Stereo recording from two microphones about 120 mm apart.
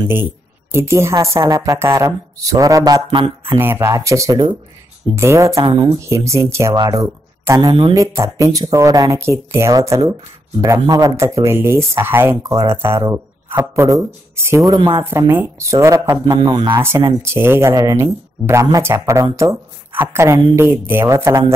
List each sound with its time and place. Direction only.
0.1 s a woman's voice: 20° right (ahead or behind); by 3.5 s 45° right (ahead or behind)
3.5 s a woman's voice: 20° right (ahead or behind)
12.4 s a woman's voice: 30° right (ahead or behind)
12.7 s a woman's voice: 20° right (ahead or behind)
14.7 s speech: 40° right (ahead or behind)
15.0 s a woman's voice: 20° right (ahead or behind)
16.3 s speech: 40° right (ahead or behind)
17.2 s a woman's voice: 20° right (ahead or behind)